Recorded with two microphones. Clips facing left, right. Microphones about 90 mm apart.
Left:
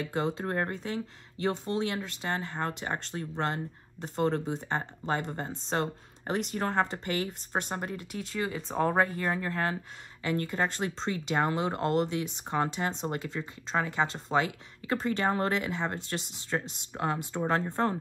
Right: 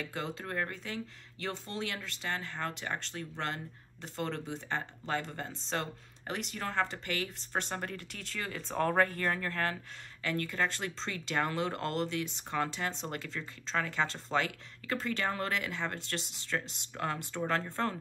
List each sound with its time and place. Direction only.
0.0 s speech: 30° left (ahead or behind)
7.3 s speech: 10° left (ahead or behind)
12.9 s speech: 15° left (ahead or behind)